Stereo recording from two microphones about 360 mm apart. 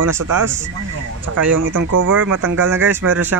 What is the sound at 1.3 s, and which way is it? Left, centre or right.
Speech, right.